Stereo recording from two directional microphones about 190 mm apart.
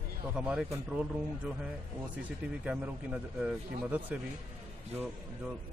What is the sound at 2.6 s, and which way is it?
A man's voice, 5° right (ahead or behind).